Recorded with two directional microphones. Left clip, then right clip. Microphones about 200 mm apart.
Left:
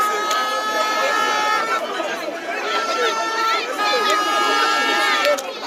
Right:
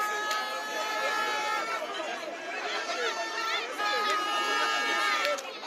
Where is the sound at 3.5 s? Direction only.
10° left (ahead or behind).